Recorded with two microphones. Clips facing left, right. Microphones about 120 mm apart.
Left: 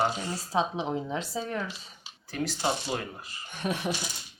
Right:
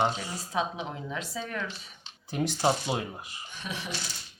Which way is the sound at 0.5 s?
25° left (ahead or behind).